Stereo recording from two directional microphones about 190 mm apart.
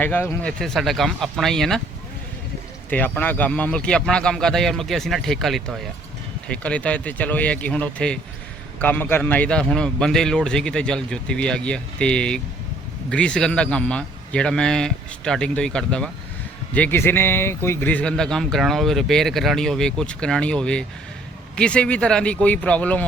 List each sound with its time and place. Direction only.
0.0 s speech: 10° left (ahead or behind)
2.9 s speech: 10° left (ahead or behind)